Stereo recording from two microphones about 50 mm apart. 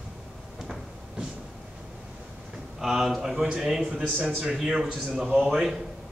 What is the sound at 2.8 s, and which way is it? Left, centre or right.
Speech, centre.